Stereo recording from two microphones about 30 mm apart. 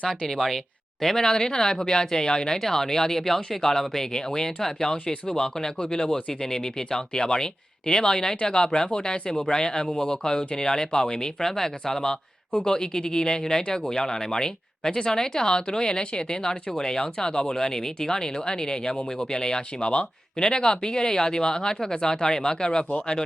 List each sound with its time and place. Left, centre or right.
0.3 s speech: centre; by 2.6 s left
2.6 s speech: centre